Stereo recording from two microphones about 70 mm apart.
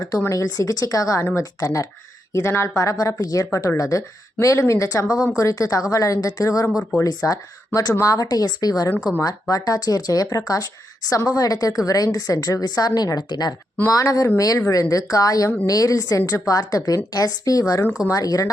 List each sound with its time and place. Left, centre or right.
0.3 s speech: left
2.3 s speech: left
3.0 s a woman's voice: left
13.8 s a woman's voice: left